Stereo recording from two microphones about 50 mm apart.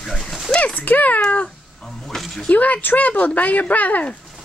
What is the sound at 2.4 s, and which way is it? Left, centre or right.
Speech, left.